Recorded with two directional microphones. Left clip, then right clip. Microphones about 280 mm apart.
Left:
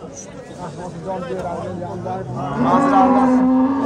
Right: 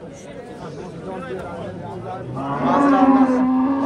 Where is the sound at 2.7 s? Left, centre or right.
Left.